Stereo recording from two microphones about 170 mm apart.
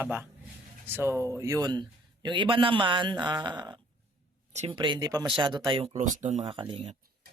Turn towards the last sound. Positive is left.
turn(degrees=-30)  # may be behind; listen again after turning